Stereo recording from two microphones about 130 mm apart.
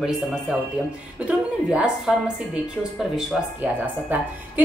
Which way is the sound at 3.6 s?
15° right (ahead or behind).